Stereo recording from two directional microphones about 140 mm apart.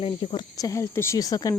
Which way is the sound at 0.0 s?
40° left (ahead or behind).